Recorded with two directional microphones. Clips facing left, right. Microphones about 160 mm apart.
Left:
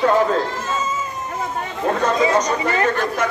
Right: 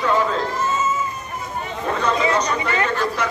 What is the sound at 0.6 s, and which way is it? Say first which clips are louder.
Cat: right 2 dB; 90° left.